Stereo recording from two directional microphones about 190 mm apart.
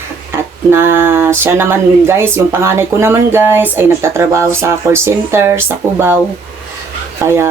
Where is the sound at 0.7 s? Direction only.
10° right (ahead or behind).